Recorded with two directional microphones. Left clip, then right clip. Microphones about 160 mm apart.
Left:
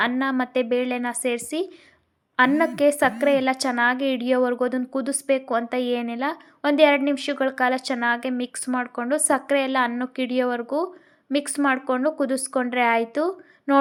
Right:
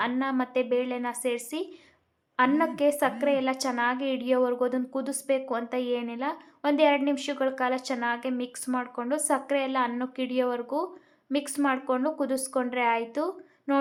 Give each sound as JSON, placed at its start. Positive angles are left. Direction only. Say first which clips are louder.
{"t": 0.0, "sound": "a woman's voice", "louder": "left 5 dB", "side_deg": 25}